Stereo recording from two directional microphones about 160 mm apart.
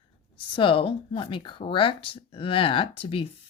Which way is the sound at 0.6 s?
30° left (ahead or behind).